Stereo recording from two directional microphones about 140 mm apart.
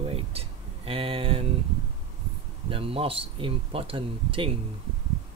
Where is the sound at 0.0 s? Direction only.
45° right (ahead or behind).